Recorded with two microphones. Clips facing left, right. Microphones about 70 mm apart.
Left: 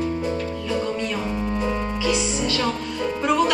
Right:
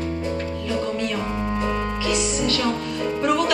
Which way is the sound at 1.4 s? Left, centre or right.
Centre.